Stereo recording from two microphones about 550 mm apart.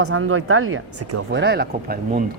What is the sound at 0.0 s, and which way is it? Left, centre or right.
Speech, right.